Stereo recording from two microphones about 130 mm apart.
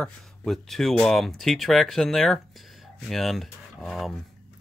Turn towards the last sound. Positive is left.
turn(degrees=0)  # may be behind; listen again after turning